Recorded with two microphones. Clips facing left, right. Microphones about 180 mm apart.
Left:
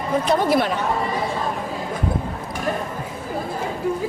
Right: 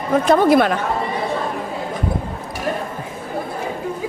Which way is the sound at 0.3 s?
60° right (ahead or behind).